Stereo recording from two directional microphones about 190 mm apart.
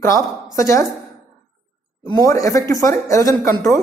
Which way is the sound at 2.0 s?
20° left (ahead or behind).